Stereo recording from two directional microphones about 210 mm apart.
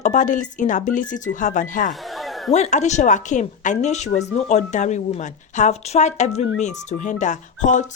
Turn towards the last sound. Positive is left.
turn(degrees=35)  # may be behind; listen again after turning